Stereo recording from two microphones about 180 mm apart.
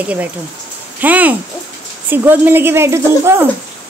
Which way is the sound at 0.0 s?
10° right (ahead or behind).